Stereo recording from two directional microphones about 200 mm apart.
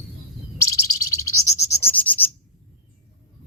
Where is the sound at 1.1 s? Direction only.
15° left (ahead or behind).